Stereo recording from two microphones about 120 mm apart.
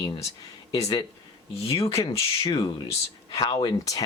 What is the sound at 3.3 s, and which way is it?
Speech, 30° left (ahead or behind).